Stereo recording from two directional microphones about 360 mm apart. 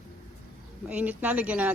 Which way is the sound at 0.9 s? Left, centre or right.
Centre.